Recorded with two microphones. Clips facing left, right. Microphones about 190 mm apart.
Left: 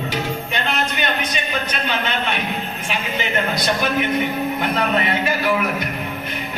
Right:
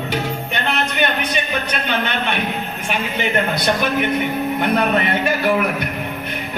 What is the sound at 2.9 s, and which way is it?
Speech, 60° right (ahead or behind).